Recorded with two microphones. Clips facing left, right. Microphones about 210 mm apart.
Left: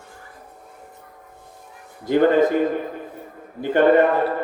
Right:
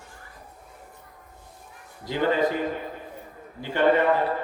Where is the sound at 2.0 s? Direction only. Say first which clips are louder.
Left 8 dB; 50° left (ahead or behind).